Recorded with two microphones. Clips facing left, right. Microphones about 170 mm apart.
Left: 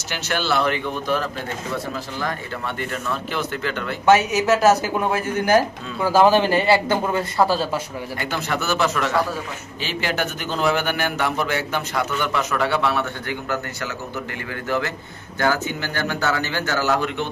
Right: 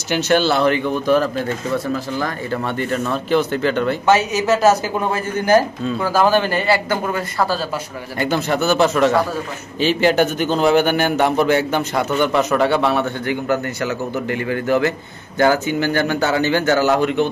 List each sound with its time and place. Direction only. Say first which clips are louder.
0.1 s a man's voice: right 7 dB; 25° right (ahead or behind)
3.3 s speech: right 9 dB; 30° right (ahead or behind)
4.0 s a man's voice: left 3 dB; 10° left (ahead or behind)
6.1 s speech: left 2 dB; 25° left (ahead or behind)
8.2 s a man's voice: right 8 dB; 30° right (ahead or behind)